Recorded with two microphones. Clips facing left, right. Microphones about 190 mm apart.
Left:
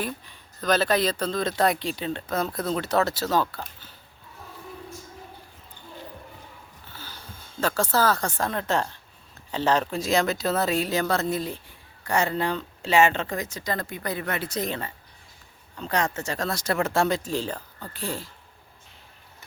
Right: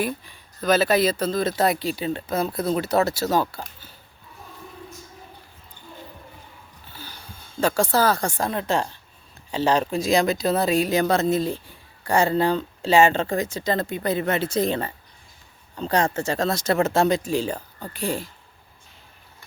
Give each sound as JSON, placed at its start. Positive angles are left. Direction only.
{"t": 0.0, "sound": "speech", "side_deg": -10}
{"t": 6.9, "sound": "a sound", "side_deg": -15}
{"t": 7.6, "sound": "speech", "side_deg": -15}